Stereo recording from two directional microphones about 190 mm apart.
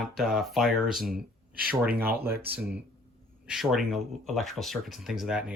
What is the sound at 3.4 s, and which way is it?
Speech, centre (ahead or behind).